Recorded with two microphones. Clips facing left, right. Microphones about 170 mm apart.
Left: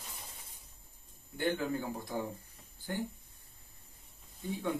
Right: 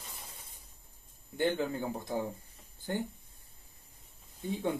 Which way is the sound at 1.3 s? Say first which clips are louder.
Right 2 dB; 20° right (ahead or behind).